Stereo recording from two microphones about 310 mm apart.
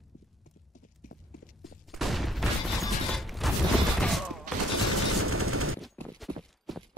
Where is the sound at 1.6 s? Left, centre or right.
Centre.